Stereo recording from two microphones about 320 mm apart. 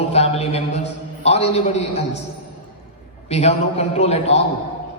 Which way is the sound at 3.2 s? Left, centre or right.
Centre.